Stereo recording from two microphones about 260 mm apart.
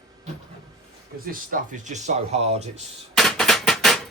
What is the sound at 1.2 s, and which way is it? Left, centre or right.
Speech, right.